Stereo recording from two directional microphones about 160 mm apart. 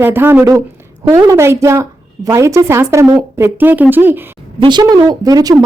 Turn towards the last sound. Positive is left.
turn(degrees=-25)  # may be behind; listen again after turning